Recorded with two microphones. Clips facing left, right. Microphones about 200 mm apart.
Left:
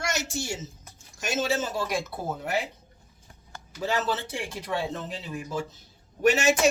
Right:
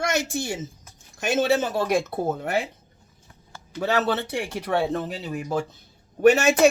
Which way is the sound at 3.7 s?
65° right (ahead or behind).